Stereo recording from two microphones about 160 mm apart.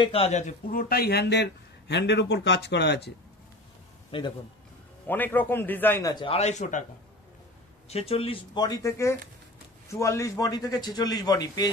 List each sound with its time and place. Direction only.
0.0 s a man's voice: 40° left (ahead or behind); by 3.1 s 90° left
4.1 s a man's voice: 35° left (ahead or behind)
5.0 s a man's voice: 10° left (ahead or behind)
6.1 s a man's voice: 35° left (ahead or behind)
7.9 s a man's voice: 35° left (ahead or behind)